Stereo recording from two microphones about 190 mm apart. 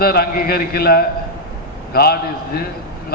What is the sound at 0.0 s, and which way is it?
A man's voice, 55° left (ahead or behind).